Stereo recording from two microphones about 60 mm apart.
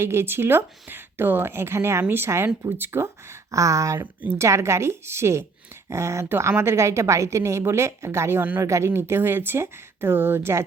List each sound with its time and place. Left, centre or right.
0.0 s a woman's voice: right
3.5 s a woman's voice: right